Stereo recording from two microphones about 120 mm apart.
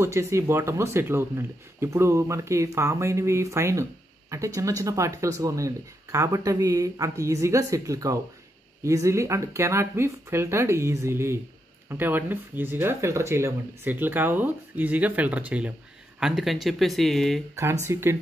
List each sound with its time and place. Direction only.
0.0 s speech: 25° right (ahead or behind); by 17.4 s centre (ahead or behind)
17.9 s speech: 25° right (ahead or behind)